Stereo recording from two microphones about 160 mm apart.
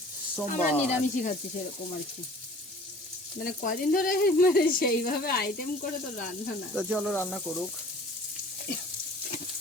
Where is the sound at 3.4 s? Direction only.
60° left (ahead or behind).